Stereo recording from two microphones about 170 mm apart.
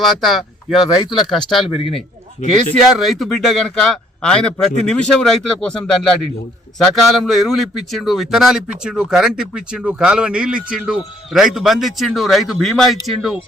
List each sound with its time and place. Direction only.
0.0 s a man's voice: centre (ahead or behind)
1.7 s a man's voice: 30° left (ahead or behind)
3.0 s a man's voice: centre (ahead or behind)